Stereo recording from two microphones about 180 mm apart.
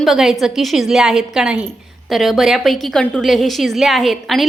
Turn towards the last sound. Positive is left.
turn(degrees=0)  # may be behind; listen again after turning